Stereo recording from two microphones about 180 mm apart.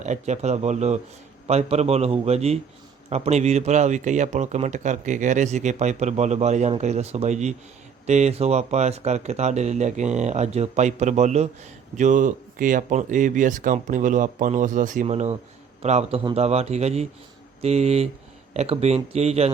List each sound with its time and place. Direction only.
0.0 s speech: 40° right (ahead or behind)